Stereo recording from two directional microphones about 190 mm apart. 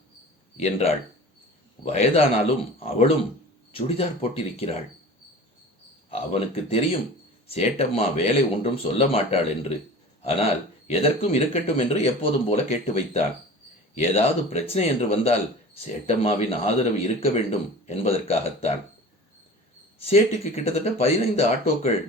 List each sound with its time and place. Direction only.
0.5 s speech: 35° left (ahead or behind)
6.1 s speech: 30° left (ahead or behind)
20.1 s speech: 35° left (ahead or behind)